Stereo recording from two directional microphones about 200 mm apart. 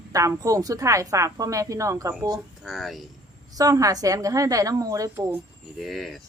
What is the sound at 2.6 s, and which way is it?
Speech, centre (ahead or behind).